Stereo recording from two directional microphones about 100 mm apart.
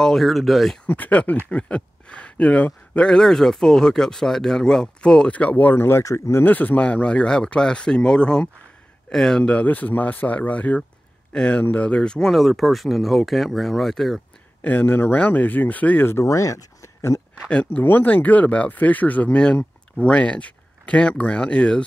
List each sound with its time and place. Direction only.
0.0 s speech: centre (ahead or behind)
0.8 s speech: 15° left (ahead or behind); by 14.2 s centre (ahead or behind)
14.6 s speech: 15° left (ahead or behind)
17.5 s speech: 15° left (ahead or behind)